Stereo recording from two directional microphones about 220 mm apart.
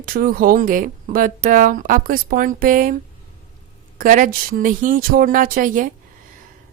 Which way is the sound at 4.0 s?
40° right (ahead or behind).